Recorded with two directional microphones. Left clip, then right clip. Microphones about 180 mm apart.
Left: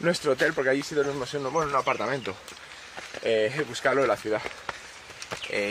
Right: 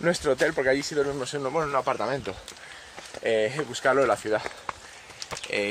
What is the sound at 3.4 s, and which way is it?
Speech, 30° right (ahead or behind).